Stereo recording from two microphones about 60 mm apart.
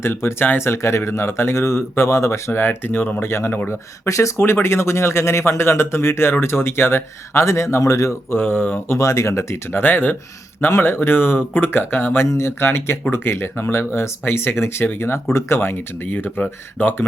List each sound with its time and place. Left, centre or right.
0.0 s speech: left
3.7 s speech: left
4.6 s speech: left
8.3 s speech: left
9.0 s speech: left
9.8 s speech: left
10.7 s speech: left